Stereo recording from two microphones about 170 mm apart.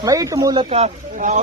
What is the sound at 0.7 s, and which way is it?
Speech, 40° right (ahead or behind).